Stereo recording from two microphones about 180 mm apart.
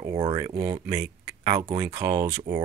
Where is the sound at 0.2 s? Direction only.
20° right (ahead or behind).